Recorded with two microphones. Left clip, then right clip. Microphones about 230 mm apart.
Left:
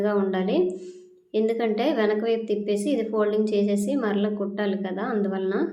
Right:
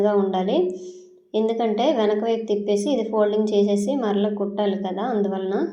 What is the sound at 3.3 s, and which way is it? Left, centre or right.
Speech, left.